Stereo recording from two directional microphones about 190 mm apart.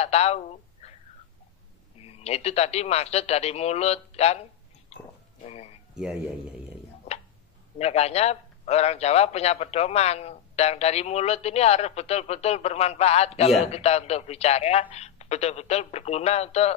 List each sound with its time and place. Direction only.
0.0 s speech: 35° left (ahead or behind)
2.0 s a man's voice: 30° left (ahead or behind)
5.5 s a man's voice: 35° left (ahead or behind)
5.9 s speech: 5° right (ahead or behind)
7.8 s a man's voice: 35° left (ahead or behind)